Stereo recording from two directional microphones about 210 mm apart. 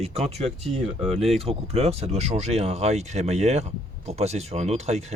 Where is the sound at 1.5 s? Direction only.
30° right (ahead or behind).